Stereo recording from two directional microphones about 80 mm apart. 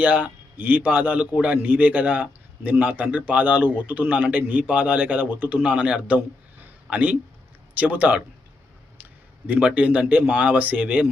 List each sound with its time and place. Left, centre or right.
0.0 s a man's voice: right
9.5 s a man's voice: centre